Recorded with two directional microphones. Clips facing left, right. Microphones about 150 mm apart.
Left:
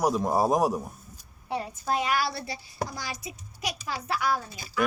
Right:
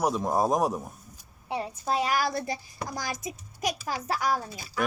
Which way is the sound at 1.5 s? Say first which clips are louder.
Even; 25° right (ahead or behind).